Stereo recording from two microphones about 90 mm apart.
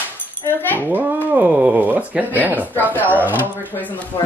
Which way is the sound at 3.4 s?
20° left (ahead or behind).